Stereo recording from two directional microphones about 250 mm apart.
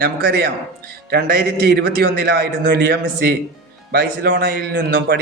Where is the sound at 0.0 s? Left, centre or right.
Right.